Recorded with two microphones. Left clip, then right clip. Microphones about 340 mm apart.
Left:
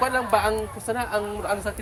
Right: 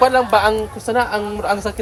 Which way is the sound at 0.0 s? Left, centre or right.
Right.